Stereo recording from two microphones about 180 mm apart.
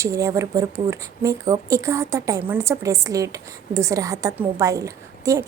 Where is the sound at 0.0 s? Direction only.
20° right (ahead or behind).